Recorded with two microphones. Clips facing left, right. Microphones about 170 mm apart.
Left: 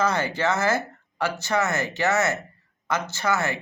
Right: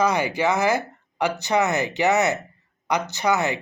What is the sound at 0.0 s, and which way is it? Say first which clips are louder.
Speech: right 3 dB; 15° right (ahead or behind).